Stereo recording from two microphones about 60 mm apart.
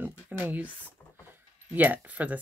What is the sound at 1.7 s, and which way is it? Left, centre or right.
Speech, right.